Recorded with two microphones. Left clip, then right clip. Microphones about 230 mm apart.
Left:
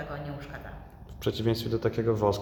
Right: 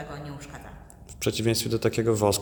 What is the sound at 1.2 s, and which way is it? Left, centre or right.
Speech, right.